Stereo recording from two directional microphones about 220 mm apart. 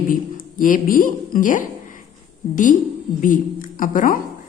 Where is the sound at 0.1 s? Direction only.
40° left (ahead or behind).